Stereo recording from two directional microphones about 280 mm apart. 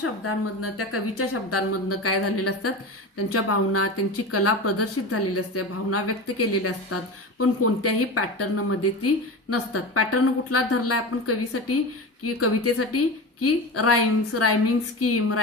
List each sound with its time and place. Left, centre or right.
0.0 s a woman's voice: left